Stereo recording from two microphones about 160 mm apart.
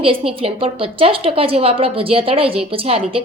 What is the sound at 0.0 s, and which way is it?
Speech, 35° right (ahead or behind).